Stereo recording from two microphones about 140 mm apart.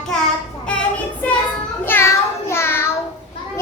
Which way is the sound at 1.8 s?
15° left (ahead or behind).